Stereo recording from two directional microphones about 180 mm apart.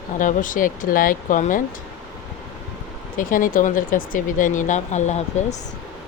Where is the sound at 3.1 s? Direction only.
50° left (ahead or behind).